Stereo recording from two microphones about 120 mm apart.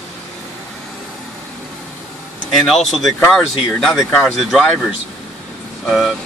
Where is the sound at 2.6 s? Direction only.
5° left (ahead or behind).